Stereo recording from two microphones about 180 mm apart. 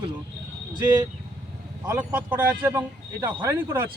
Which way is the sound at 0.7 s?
25° right (ahead or behind).